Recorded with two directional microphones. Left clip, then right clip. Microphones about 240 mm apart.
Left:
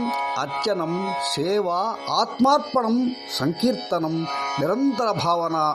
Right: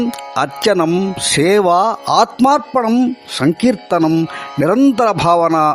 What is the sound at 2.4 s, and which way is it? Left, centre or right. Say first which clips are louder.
Speech: right 6 dB; right.